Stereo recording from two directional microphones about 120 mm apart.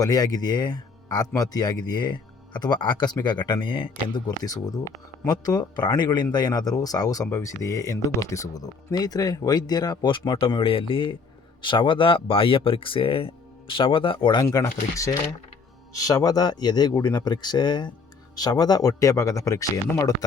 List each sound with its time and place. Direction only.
0.0 s speech: 30° left (ahead or behind)
14.4 s speech: 30° left (ahead or behind)